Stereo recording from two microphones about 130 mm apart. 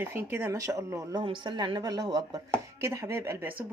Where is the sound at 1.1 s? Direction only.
40° right (ahead or behind).